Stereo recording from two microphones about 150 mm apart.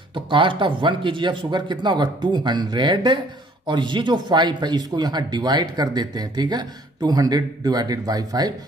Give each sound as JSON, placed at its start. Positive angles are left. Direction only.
{"t": 0.1, "sound": "a man's voice", "side_deg": -35}